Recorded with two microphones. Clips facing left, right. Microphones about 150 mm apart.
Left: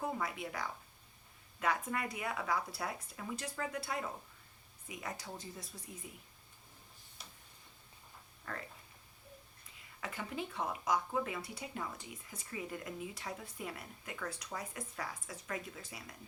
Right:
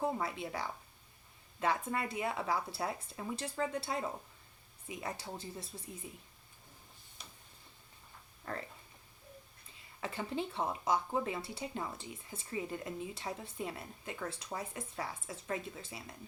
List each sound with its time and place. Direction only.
0.0 s speech: 30° right (ahead or behind)
8.5 s speech: 35° right (ahead or behind)
10.0 s speech: 30° right (ahead or behind)